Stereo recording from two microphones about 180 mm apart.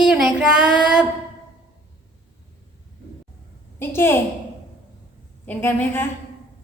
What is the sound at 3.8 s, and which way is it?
Speech, 10° left (ahead or behind).